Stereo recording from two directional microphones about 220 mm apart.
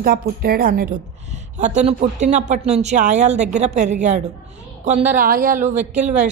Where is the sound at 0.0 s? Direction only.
45° right (ahead or behind).